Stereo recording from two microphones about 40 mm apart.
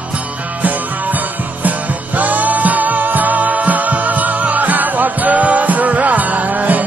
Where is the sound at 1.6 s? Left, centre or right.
Right.